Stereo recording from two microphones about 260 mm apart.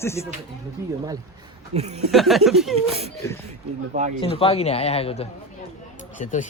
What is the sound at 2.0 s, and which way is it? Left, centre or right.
Speech, centre.